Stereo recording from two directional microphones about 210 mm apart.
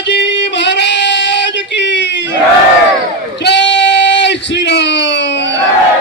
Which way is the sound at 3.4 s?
55° left (ahead or behind).